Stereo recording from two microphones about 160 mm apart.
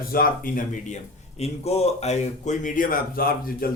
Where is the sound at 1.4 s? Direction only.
40° left (ahead or behind).